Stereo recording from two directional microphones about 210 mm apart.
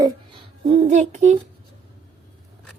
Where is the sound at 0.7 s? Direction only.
30° right (ahead or behind).